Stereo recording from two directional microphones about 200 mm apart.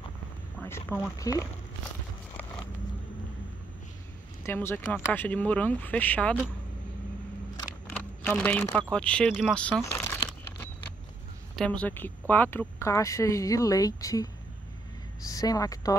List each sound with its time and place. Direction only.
0.6 s speech: 10° left (ahead or behind)
4.4 s speech: 10° left (ahead or behind)
7.6 s a sound: 10° left (ahead or behind)
8.9 s speech: 5° left (ahead or behind)
11.5 s speech: 5° left (ahead or behind)